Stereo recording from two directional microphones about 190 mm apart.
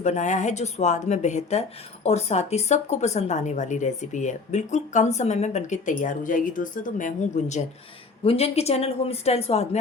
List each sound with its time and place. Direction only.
0.0 s speech: 40° left (ahead or behind)